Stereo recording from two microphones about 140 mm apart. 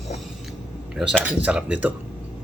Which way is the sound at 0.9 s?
5° right (ahead or behind).